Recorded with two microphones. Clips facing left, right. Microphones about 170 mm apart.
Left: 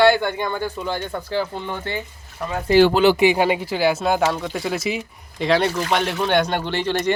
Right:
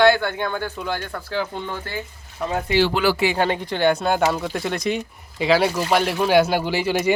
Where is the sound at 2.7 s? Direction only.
50° left (ahead or behind).